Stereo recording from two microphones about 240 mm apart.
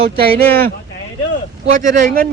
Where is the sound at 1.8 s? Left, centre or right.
Right.